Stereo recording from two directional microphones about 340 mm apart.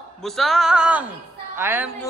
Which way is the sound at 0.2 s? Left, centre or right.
Centre.